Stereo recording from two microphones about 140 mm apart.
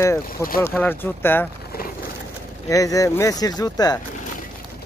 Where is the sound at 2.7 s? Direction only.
25° left (ahead or behind).